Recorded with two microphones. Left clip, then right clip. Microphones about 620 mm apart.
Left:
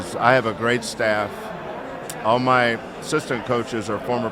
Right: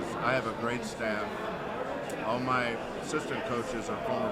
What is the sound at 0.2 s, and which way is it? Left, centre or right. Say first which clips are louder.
A man's voice: left 13 dB; left.